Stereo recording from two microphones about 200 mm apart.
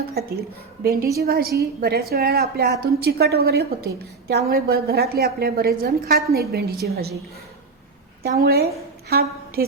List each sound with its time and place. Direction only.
0.1 s a woman's voice: 50° right (ahead or behind)
8.4 s a woman's voice: 50° right (ahead or behind)